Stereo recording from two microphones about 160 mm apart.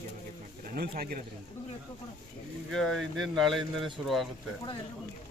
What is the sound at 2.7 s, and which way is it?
Speech, centre (ahead or behind).